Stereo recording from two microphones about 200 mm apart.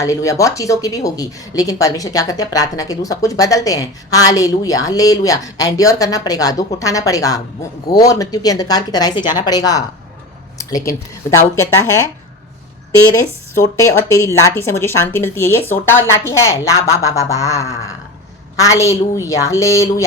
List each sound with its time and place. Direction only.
0.0 s a woman's voice: 15° left (ahead or behind)
13.7 s speech: 15° left (ahead or behind)